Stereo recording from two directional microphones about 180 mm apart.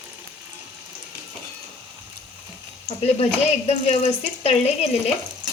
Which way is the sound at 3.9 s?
35° left (ahead or behind).